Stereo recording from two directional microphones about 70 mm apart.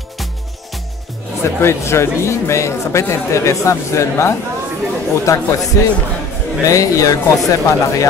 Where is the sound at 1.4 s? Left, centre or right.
Left.